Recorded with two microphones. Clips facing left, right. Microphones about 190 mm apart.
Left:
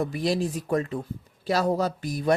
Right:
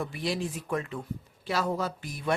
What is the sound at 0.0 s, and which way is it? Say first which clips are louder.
Speech: left 6 dB; 40° left (ahead or behind).